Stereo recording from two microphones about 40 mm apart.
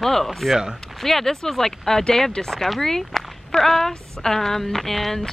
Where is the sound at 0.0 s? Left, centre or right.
Centre.